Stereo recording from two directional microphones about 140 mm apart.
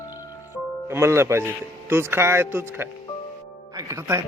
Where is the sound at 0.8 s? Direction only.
20° right (ahead or behind).